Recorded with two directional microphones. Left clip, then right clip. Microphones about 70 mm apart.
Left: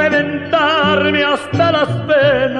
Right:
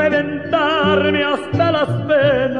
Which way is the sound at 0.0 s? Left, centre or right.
Right.